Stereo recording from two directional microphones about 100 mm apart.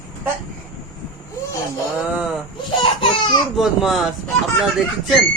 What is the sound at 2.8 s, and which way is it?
Laughter, 60° left (ahead or behind).